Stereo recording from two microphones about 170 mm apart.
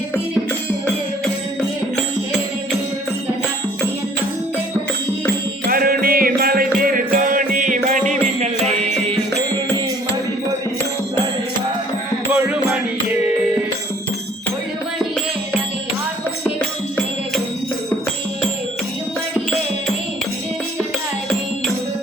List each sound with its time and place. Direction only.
5.6 s music: 60° right (ahead or behind)
12.3 s music: 10° right (ahead or behind)